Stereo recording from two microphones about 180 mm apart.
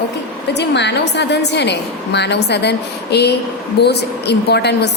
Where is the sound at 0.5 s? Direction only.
70° left (ahead or behind).